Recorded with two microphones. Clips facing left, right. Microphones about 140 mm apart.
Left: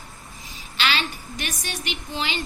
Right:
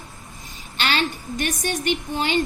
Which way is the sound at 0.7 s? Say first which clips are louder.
Right 2 dB; 50° right (ahead or behind).